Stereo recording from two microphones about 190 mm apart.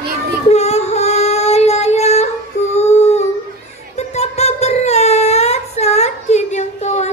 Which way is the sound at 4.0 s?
35° left (ahead or behind).